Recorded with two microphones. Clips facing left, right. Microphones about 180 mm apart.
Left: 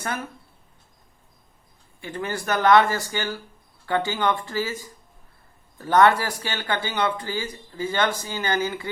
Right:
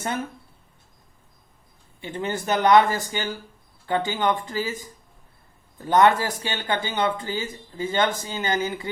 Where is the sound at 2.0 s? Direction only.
20° right (ahead or behind).